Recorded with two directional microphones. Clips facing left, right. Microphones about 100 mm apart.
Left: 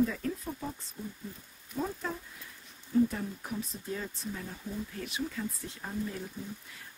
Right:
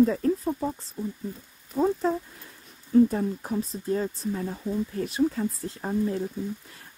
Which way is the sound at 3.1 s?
35° right (ahead or behind).